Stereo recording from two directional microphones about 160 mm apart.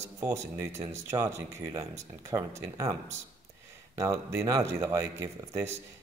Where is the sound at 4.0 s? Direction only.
20° right (ahead or behind).